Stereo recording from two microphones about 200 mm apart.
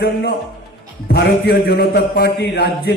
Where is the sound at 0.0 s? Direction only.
50° left (ahead or behind).